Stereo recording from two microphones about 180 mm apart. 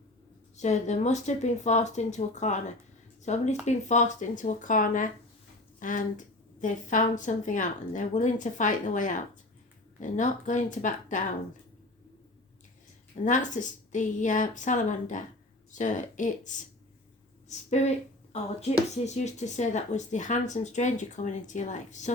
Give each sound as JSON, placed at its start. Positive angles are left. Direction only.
{"t": 0.5, "sound": "a woman's voice", "side_deg": 40}
{"t": 13.2, "sound": "a woman's voice", "side_deg": 45}
{"t": 17.7, "sound": "speech", "side_deg": 40}